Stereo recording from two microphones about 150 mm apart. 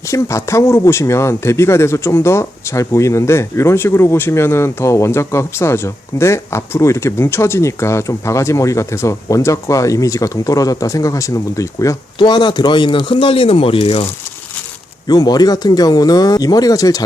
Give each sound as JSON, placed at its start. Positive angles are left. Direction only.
{"t": 0.1, "sound": "speech", "side_deg": 20}
{"t": 15.0, "sound": "speech", "side_deg": 25}